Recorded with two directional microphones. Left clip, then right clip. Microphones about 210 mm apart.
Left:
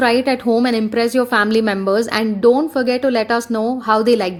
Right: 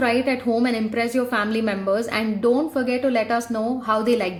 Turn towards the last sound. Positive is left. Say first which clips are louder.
# left 6 dB
turn(degrees=40)  # may be behind; listen again after turning